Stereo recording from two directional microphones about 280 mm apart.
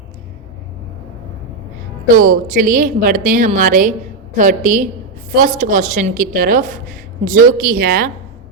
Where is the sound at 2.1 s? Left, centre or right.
Right.